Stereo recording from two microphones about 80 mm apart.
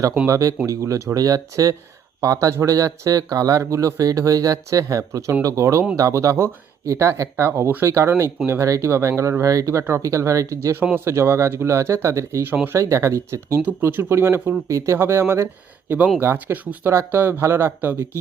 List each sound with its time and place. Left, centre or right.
0.3 s speech: right
14.7 s speech: right
14.9 s speech: right
15.9 s speech: centre
16.2 s speech: right